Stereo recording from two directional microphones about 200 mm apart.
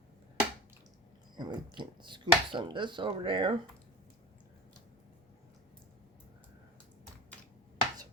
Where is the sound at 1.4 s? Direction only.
25° right (ahead or behind).